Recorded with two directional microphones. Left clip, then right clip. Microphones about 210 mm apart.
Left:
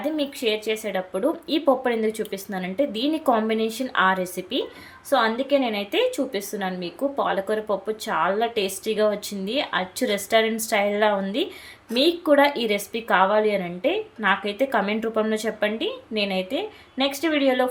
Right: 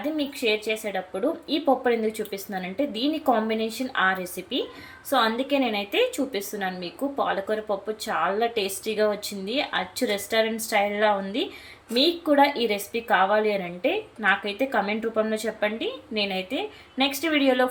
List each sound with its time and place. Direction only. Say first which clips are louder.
0.0 s a woman's voice: left 2 dB; 20° left (ahead or behind)